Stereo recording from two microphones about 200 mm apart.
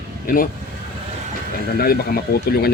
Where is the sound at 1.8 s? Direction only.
50° left (ahead or behind).